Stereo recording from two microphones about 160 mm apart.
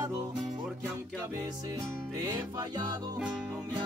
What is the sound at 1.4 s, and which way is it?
Music, 20° right (ahead or behind).